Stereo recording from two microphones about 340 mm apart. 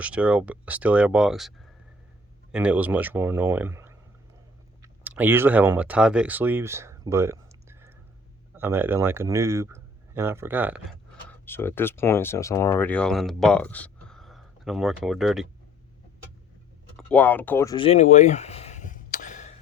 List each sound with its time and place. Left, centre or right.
0.0 s speech: centre
17.0 s speech: centre; by 19.5 s left